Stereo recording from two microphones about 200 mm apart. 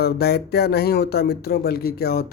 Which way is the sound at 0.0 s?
55° left (ahead or behind).